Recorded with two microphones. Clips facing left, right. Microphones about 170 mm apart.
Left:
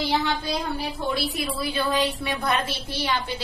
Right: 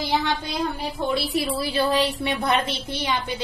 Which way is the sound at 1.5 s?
30° right (ahead or behind).